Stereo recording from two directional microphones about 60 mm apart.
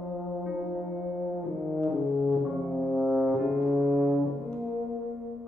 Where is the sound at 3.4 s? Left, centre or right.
Centre.